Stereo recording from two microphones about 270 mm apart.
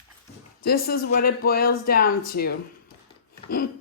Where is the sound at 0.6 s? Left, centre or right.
Left.